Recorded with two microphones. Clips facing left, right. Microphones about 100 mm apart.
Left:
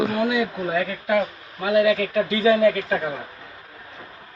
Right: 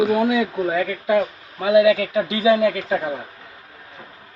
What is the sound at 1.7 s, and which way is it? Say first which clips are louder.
Speech: right 3 dB; 15° right (ahead or behind).